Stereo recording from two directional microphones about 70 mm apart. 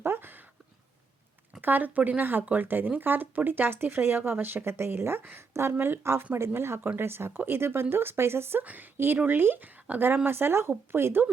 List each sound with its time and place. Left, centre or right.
0.0 s a sound: right
1.6 s speech: right
8.6 s speech: right